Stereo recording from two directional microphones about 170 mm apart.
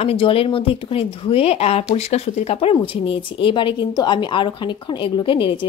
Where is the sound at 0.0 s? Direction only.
35° left (ahead or behind).